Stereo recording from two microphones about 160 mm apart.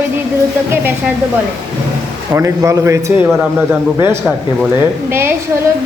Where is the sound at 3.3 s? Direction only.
5° right (ahead or behind).